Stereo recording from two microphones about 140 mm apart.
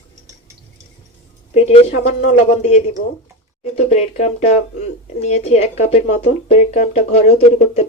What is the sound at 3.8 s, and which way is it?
Speech, 55° left (ahead or behind).